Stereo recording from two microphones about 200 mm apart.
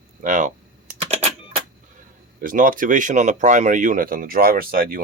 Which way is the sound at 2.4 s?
45° right (ahead or behind).